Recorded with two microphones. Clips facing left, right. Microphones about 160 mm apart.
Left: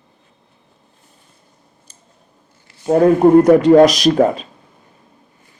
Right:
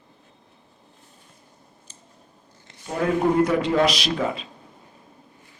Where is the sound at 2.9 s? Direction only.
45° left (ahead or behind).